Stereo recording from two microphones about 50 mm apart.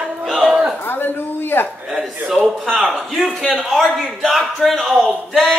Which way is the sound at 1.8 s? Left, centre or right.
Centre.